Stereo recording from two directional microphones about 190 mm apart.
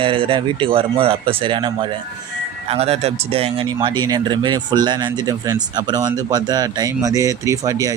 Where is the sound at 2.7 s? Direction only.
35° right (ahead or behind).